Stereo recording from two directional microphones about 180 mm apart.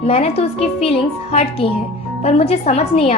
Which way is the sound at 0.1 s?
35° left (ahead or behind).